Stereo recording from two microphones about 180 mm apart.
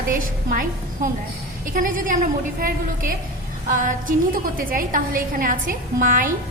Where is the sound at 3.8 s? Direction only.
45° right (ahead or behind).